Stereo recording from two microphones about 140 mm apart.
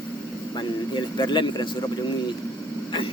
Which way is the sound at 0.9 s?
30° left (ahead or behind).